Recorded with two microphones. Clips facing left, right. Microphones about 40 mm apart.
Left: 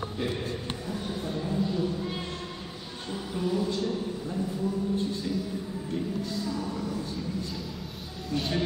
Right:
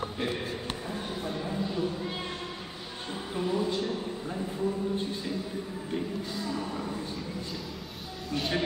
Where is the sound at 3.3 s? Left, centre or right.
Centre.